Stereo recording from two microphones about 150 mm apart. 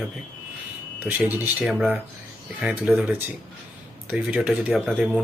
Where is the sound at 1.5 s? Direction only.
5° right (ahead or behind).